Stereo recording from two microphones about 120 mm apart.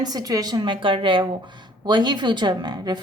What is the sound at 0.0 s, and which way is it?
Speech, 30° right (ahead or behind).